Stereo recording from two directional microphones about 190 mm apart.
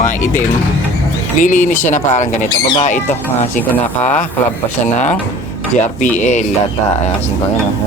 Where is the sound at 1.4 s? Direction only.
40° left (ahead or behind).